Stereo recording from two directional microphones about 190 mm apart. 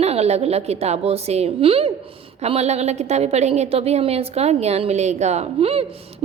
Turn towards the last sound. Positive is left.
turn(degrees=-30)  # may be behind; listen again after turning